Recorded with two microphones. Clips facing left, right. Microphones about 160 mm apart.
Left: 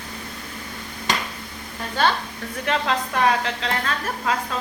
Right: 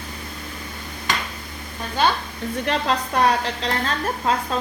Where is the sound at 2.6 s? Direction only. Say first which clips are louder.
Even; 35° right (ahead or behind).